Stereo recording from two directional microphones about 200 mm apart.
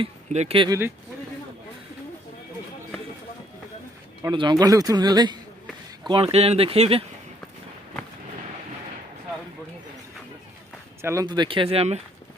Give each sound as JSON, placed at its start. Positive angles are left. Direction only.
{"t": 0.0, "sound": "speech", "side_deg": -30}
{"t": 4.2, "sound": "speech", "side_deg": -20}
{"t": 11.0, "sound": "speech", "side_deg": -15}